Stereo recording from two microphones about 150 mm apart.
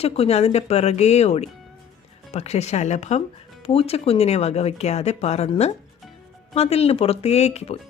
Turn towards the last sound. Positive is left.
turn(degrees=45)  # may be behind; listen again after turning